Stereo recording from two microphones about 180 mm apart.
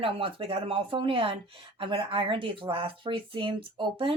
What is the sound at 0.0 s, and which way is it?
Speech, 30° right (ahead or behind).